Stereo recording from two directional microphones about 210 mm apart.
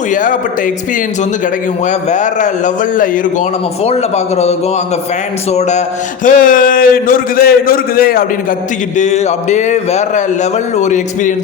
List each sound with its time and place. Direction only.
0.1 s speech: 40° left (ahead or behind)
1.9 s speech: 35° left (ahead or behind)
9.0 s speech: 35° left (ahead or behind)